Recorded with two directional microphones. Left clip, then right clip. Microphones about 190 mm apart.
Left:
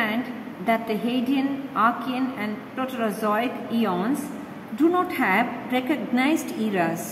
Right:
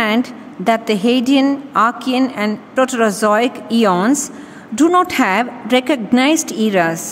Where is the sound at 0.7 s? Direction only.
60° right (ahead or behind); by 7.0 s 45° right (ahead or behind).